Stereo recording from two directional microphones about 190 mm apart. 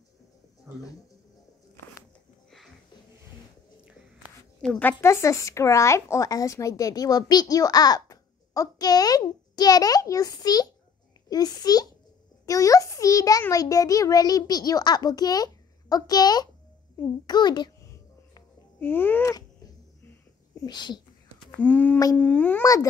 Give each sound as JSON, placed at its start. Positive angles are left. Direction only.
{"t": 4.6, "sound": "speech", "side_deg": 5}
{"t": 17.3, "sound": "babbling", "side_deg": 20}
{"t": 20.6, "sound": "speech", "side_deg": 20}
{"t": 21.5, "sound": "a child's voice", "side_deg": 10}